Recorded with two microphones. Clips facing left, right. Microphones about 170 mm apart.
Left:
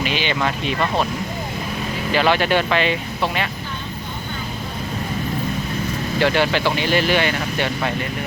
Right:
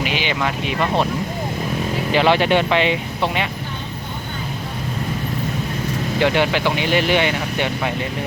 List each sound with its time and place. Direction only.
0.0 s speech: 10° right (ahead or behind)
2.1 s speech: 25° right (ahead or behind)
6.1 s speech: 15° right (ahead or behind)